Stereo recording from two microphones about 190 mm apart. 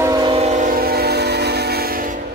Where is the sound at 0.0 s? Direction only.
20° right (ahead or behind); by 2.0 s 55° right (ahead or behind).